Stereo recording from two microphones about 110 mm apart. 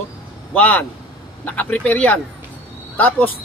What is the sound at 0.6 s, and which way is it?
A woman's voice, 15° left (ahead or behind).